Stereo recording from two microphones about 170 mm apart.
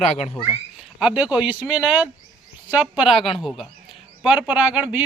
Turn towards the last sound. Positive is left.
turn(degrees=-10)  # may be behind; listen again after turning